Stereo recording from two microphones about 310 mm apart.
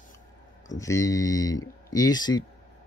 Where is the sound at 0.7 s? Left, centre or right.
Centre.